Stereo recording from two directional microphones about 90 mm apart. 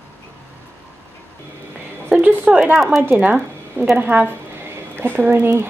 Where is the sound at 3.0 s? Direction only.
20° right (ahead or behind).